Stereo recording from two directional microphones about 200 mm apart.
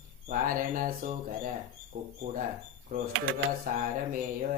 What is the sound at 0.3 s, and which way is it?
Speech, 45° right (ahead or behind).